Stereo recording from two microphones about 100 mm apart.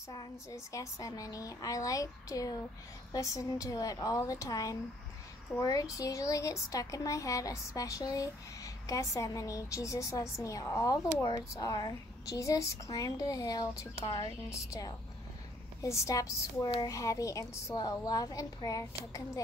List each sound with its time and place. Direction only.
0.1 s a woman's voice: 40° left (ahead or behind)